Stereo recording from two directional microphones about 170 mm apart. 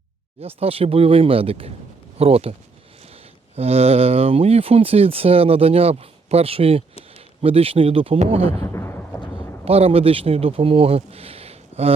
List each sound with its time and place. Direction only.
0.3 s speech: 35° right (ahead or behind)
8.6 s a sound: 15° left (ahead or behind)
9.6 s speech: 35° right (ahead or behind)